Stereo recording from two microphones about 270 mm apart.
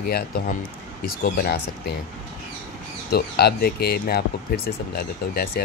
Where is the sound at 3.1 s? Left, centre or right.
Left.